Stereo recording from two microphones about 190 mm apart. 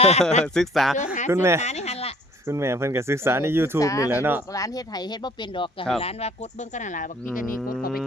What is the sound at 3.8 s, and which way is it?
Speech, 15° left (ahead or behind).